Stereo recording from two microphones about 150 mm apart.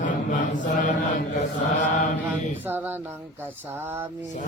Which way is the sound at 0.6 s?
60° left (ahead or behind).